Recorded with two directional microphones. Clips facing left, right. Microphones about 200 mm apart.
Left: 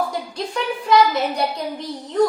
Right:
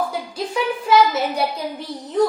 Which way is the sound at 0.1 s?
5° right (ahead or behind).